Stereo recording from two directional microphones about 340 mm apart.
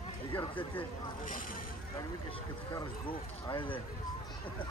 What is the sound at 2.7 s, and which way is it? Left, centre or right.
Speech, centre.